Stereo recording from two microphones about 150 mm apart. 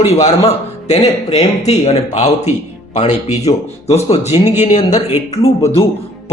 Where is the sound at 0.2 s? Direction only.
45° left (ahead or behind).